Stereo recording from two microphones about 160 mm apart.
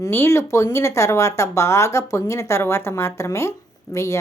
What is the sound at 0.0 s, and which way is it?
A woman's voice, 15° left (ahead or behind).